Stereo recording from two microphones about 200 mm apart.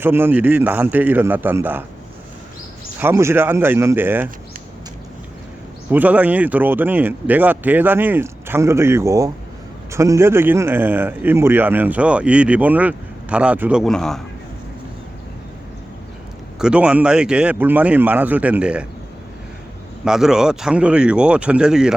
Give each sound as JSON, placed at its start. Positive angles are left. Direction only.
{"t": 0.0, "sound": "speech", "side_deg": -10}
{"t": 3.0, "sound": "speech", "side_deg": -10}
{"t": 5.9, "sound": "speech", "side_deg": -10}
{"t": 16.6, "sound": "speech", "side_deg": -5}
{"t": 20.1, "sound": "speech", "side_deg": -5}